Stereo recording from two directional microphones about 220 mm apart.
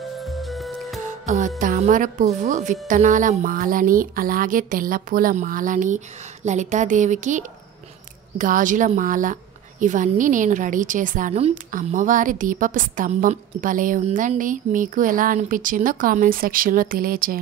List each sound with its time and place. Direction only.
0.2 s music: centre (ahead or behind)
1.2 s speech: 35° right (ahead or behind)